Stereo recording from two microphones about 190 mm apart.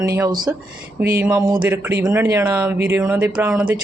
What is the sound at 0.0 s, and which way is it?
Speech, 15° right (ahead or behind).